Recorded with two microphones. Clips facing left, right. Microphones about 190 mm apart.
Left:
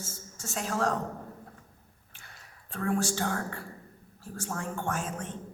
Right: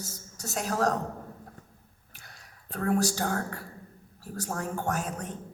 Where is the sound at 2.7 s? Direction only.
40° right (ahead or behind).